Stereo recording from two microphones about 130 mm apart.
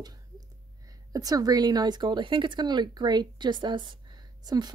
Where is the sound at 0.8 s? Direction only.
25° right (ahead or behind).